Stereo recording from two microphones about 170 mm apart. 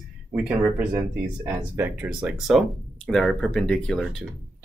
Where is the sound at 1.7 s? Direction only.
10° right (ahead or behind).